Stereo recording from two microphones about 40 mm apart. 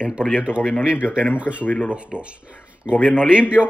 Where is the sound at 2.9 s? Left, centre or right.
Left.